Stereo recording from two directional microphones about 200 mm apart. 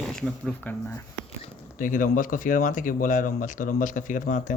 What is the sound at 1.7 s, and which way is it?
Speech, 40° left (ahead or behind).